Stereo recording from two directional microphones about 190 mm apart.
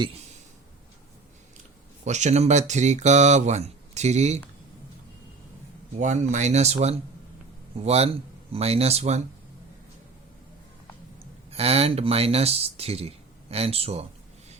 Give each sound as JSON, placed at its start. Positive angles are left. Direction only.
{"t": 2.0, "sound": "speech", "side_deg": -40}
{"t": 6.0, "sound": "speech", "side_deg": -40}
{"t": 11.5, "sound": "speech", "side_deg": -30}